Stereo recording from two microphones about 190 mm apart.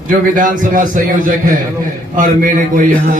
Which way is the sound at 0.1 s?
45° right (ahead or behind).